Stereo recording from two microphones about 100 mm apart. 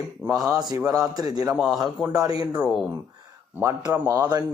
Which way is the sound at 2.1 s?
40° right (ahead or behind).